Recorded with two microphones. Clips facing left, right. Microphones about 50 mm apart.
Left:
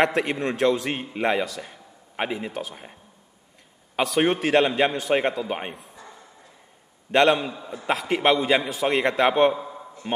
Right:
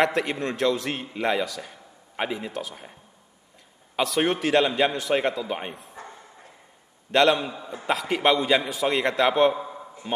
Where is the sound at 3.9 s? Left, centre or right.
Centre.